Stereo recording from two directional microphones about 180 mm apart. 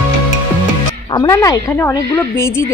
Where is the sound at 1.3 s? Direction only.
15° left (ahead or behind).